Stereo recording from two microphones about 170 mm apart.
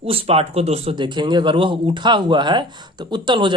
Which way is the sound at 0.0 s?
35° right (ahead or behind).